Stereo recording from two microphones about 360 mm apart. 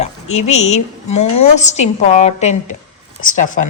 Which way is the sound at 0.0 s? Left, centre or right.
Centre.